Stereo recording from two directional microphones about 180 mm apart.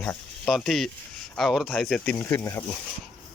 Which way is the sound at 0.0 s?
10° left (ahead or behind).